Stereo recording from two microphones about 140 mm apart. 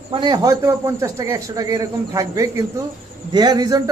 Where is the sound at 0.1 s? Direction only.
30° right (ahead or behind).